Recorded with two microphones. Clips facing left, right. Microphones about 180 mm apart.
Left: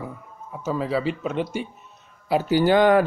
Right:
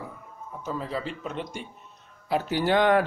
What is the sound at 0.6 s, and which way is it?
Speech, 75° left (ahead or behind).